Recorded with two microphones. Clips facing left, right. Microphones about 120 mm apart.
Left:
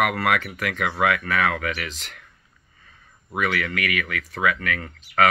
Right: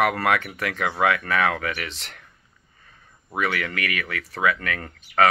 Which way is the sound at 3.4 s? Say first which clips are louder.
Left 1 dB; 30° right (ahead or behind).